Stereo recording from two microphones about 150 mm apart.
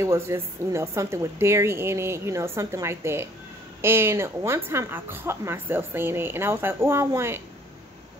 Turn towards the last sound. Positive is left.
turn(degrees=-15)  # may be behind; listen again after turning